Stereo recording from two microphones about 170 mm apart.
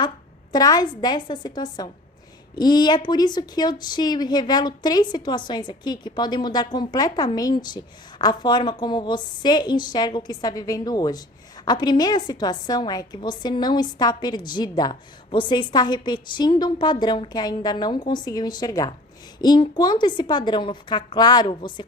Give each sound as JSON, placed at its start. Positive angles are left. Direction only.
{"t": 0.5, "sound": "a woman's voice", "side_deg": 20}